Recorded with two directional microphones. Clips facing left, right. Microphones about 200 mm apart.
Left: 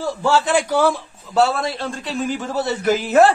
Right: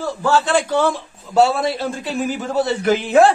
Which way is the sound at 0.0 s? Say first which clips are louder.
Even; 15° left (ahead or behind).